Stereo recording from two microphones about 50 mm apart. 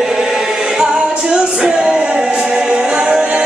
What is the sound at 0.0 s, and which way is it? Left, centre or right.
Choir, centre.